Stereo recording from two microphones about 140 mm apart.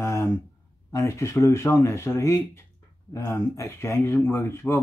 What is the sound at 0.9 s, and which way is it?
Speech, 20° left (ahead or behind).